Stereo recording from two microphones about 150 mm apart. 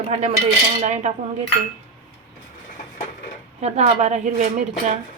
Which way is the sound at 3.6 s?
45° right (ahead or behind).